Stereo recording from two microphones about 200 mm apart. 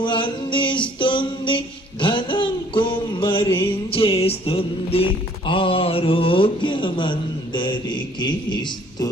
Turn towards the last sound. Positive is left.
turn(degrees=25)  # may be behind; listen again after turning